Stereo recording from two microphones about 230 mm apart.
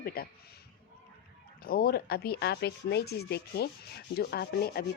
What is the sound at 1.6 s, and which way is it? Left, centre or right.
Speech, left.